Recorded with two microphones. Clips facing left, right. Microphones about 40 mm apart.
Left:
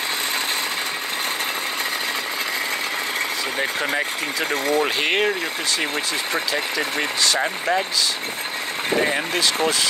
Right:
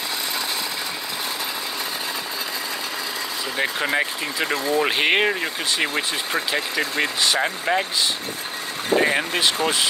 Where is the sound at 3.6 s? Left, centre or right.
Centre.